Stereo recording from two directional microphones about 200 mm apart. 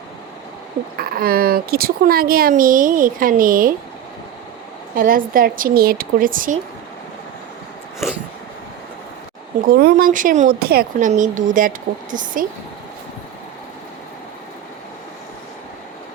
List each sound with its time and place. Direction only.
0.9 s speech: 50° right (ahead or behind)
4.9 s speech: 45° right (ahead or behind)
9.6 s speech: 50° right (ahead or behind)
11.1 s speech: 40° right (ahead or behind)